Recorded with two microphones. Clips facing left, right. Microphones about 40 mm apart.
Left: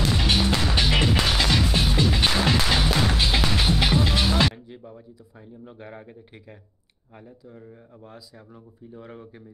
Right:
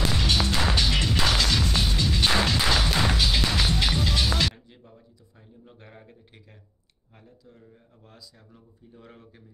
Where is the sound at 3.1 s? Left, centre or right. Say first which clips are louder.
Left 2 dB; left.